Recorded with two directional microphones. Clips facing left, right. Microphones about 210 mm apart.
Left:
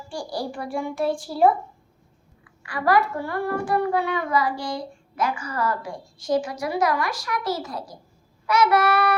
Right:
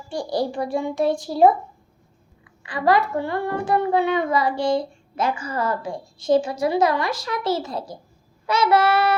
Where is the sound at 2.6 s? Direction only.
20° right (ahead or behind).